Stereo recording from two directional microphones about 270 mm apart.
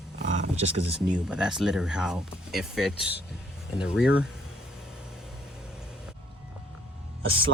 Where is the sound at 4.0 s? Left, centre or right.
Left.